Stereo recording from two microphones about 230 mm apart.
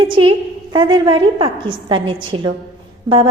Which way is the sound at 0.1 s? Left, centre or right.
Right.